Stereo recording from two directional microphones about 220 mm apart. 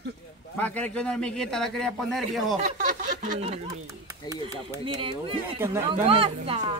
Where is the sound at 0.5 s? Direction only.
5° left (ahead or behind).